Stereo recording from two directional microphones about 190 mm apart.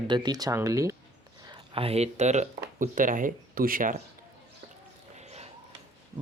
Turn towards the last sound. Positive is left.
turn(degrees=-35)  # may be behind; listen again after turning